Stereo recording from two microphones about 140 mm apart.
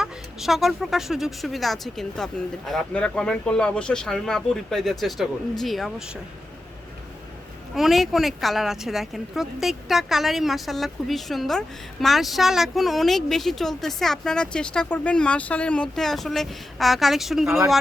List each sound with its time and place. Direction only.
0.0 s speech: centre (ahead or behind)
7.8 s speech: centre (ahead or behind)